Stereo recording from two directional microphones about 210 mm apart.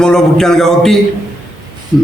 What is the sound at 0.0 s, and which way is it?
Speech, 5° left (ahead or behind).